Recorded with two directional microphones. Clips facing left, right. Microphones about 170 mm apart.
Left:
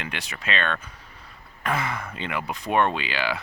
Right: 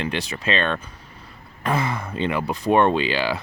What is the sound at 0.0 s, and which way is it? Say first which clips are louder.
Speech: right 8 dB; 30° right (ahead or behind).